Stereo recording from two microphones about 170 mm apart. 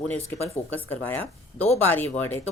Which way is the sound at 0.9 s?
10° left (ahead or behind).